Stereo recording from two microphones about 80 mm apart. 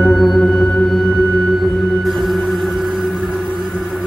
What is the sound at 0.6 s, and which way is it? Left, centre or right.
Singing bowl, centre.